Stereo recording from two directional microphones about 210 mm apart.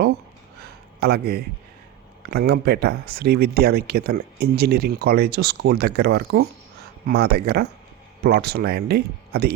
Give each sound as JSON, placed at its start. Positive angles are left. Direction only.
{"t": 0.9, "sound": "speech", "side_deg": -50}